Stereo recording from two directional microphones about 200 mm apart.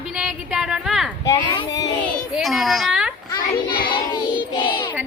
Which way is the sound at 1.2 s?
15° left (ahead or behind).